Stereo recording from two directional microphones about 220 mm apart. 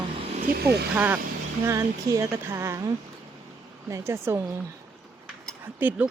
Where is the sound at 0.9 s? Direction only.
5° right (ahead or behind).